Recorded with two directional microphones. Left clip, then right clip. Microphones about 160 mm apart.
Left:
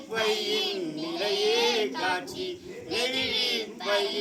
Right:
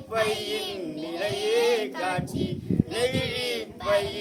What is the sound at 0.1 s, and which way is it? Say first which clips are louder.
Speech: right 1 dB; 35° right (ahead or behind).